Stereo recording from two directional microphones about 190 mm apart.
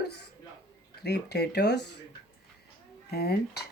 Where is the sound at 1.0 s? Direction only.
60° left (ahead or behind).